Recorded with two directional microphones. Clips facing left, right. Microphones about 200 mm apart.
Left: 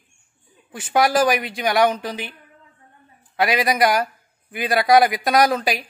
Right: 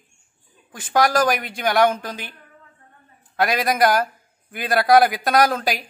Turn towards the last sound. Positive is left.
turn(degrees=0)  # may be behind; listen again after turning